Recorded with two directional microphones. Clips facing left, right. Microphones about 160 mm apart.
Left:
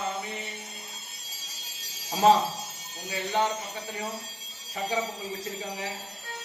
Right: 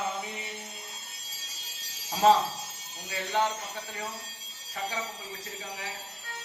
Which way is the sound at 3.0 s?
5° left (ahead or behind).